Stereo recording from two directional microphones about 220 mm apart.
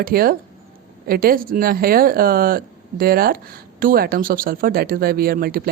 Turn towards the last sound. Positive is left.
turn(degrees=-40)  # may be behind; listen again after turning